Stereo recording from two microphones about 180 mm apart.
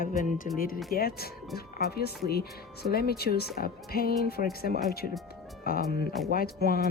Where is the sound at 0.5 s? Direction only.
55° left (ahead or behind).